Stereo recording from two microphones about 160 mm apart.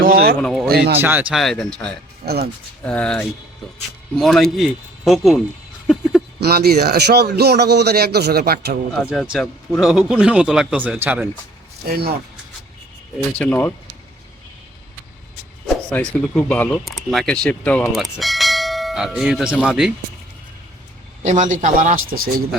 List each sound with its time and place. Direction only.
0.0 s speech: 65° right (ahead or behind)
0.4 s speech: centre (ahead or behind)
0.7 s speech: 90° right
1.0 s speech: 10° right (ahead or behind)
2.2 s speech: 80° right
2.8 s speech: 10° left (ahead or behind)
6.4 s speech: 75° right (ahead or behind)
9.1 s speech: centre (ahead or behind)
11.9 s speech: 80° right
13.4 s speech: 10° left (ahead or behind)
15.6 s speech: 5° left (ahead or behind)
17.9 s bell: centre (ahead or behind)
21.2 s speech: 50° right (ahead or behind)